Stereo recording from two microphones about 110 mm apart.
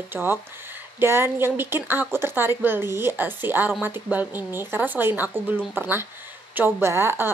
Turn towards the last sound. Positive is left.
turn(degrees=-20)  # may be behind; listen again after turning